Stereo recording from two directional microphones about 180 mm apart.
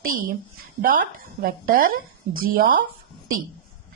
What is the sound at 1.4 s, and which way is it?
A woman's voice, 50° right (ahead or behind).